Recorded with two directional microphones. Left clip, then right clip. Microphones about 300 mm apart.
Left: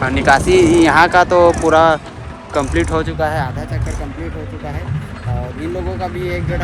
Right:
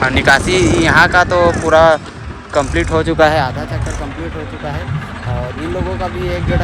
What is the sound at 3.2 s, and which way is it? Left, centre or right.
Speech, right.